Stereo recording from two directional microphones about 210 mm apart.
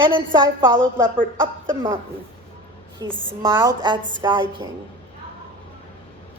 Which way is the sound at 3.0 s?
15° right (ahead or behind).